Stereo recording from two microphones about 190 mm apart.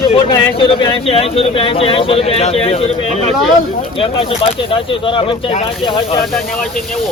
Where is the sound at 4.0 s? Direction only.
30° left (ahead or behind).